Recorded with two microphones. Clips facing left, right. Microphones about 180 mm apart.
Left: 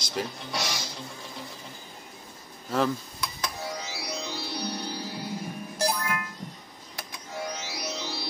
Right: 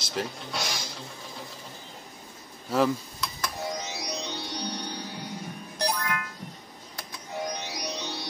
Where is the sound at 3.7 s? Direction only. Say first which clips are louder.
Right 2 dB; 20° right (ahead or behind).